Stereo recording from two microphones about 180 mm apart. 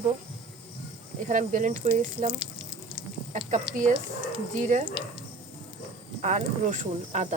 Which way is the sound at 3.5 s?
45° right (ahead or behind).